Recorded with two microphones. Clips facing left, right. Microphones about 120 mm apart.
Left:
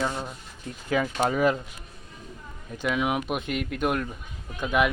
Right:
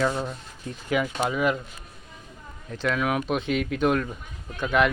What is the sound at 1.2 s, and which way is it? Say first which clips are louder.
Speech: left 4 dB; 45° left (ahead or behind).